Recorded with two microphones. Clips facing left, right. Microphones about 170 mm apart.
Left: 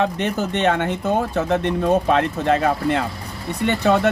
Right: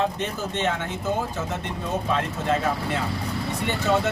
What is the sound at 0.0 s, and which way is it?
Speech, 70° left (ahead or behind).